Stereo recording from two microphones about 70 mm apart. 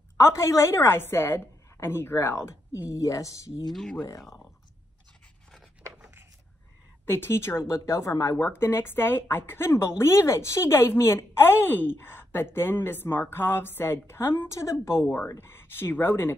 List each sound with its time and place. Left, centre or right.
0.2 s a woman's voice: left
2.9 s speech: left
3.7 s speech: centre
7.1 s a woman's voice: left
8.6 s a woman's voice: left